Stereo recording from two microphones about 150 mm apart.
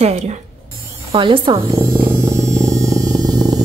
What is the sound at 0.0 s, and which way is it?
Speech, 50° right (ahead or behind).